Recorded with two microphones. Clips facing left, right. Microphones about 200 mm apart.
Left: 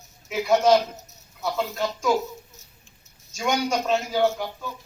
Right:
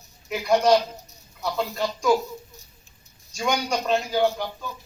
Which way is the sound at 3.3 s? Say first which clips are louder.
Left 1 dB; centre (ahead or behind).